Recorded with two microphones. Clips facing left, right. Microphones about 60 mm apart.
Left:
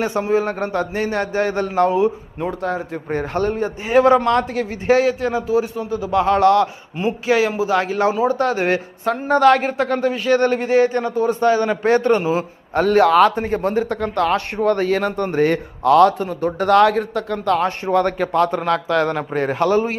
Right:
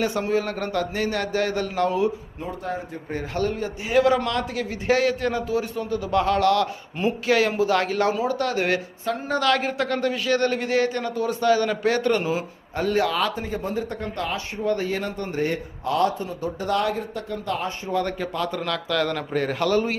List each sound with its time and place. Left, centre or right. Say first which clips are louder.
0.0 s a man's voice: left 5 dB; left
2.4 s a man's voice: left 8 dB; left
3.1 s a man's voice: left 5 dB; left
5.0 s a man's voice: left 4 dB; centre
6.2 s a man's voice: left 7 dB; left
7.0 s a man's voice: left 3 dB; centre; by 8.8 s left
9.2 s a man's voice: left 9 dB; left
9.7 s a man's voice: left 5 dB; left
12.7 s a man's voice: left 9 dB; left
16.2 s speech: left 8 dB; left